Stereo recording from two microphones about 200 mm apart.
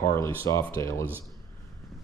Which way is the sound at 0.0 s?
10° left (ahead or behind).